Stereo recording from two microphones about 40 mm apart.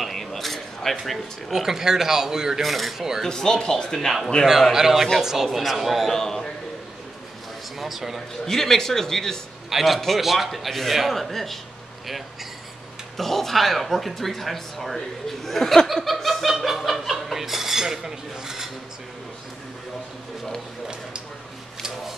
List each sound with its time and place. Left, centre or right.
0.0 s a sound: centre
1.5 s a man's voice: centre
2.6 s speech: centre
3.3 s speech: centre
4.5 s a man's voice: centre
6.1 s speech: centre
7.8 s speech: centre
8.5 s speech: centre
9.7 s speech: centre
13.2 s speech: centre
15.9 s laughter: centre
17.4 s cutlery: centre